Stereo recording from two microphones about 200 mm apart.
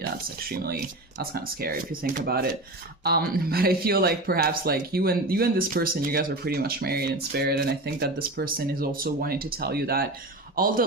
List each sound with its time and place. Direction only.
0.4 s speech: 50° right (ahead or behind)